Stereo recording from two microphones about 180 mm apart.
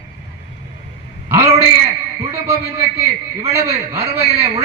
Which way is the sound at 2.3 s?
15° right (ahead or behind).